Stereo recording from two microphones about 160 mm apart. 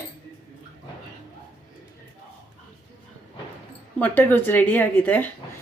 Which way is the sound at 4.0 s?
10° left (ahead or behind).